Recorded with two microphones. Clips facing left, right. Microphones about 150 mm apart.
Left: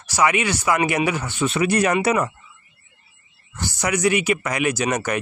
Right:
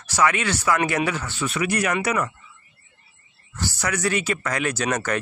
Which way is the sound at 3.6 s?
15° left (ahead or behind).